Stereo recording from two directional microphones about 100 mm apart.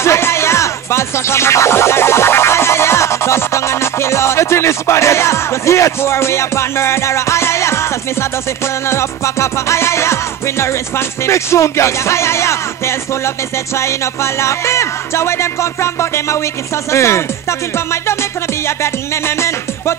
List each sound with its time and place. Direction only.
0.0 s speech: 25° left (ahead or behind)
8.8 s music: 25° left (ahead or behind)